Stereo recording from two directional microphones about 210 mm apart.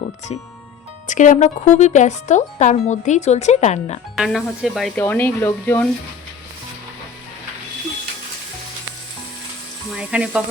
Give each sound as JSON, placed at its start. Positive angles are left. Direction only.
{"t": 1.0, "sound": "speech", "side_deg": 35}
{"t": 4.1, "sound": "speech", "side_deg": 0}
{"t": 9.9, "sound": "speech", "side_deg": -5}